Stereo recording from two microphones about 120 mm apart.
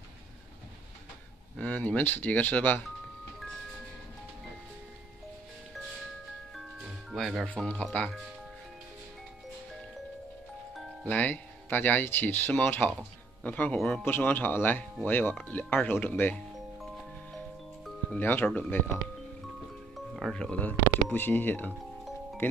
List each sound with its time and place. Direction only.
1.6 s speech: 15° left (ahead or behind)
7.1 s speech: centre (ahead or behind)
11.1 s speech: 15° left (ahead or behind)
13.7 s a man's voice: centre (ahead or behind)
14.0 s speech: 15° left (ahead or behind)
18.1 s speech: 15° left (ahead or behind)
20.2 s speech: 5° left (ahead or behind)